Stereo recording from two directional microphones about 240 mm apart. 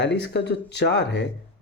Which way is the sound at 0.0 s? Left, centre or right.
Left.